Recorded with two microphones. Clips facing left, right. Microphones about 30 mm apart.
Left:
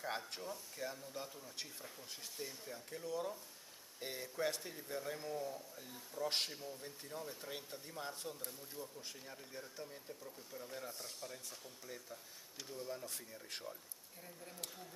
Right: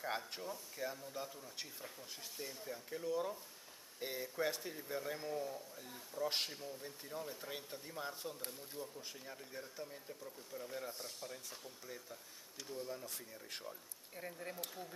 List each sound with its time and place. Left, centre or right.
0.0 s a man's voice: centre
14.1 s speech: right